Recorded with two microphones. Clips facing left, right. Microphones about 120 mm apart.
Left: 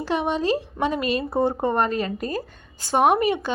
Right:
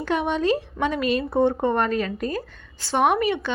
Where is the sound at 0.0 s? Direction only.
35° left (ahead or behind).